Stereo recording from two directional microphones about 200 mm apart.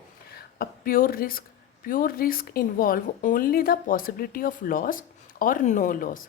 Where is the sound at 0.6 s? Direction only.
45° left (ahead or behind).